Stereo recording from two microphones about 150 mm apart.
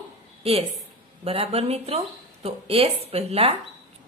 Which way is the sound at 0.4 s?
40° right (ahead or behind).